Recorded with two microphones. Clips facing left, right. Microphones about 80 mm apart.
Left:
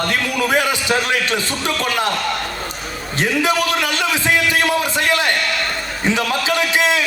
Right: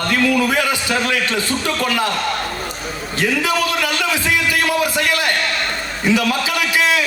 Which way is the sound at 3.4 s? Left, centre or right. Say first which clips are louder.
Left 1 dB; left.